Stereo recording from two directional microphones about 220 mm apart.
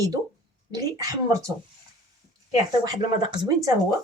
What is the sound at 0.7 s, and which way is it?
Speech, 15° right (ahead or behind).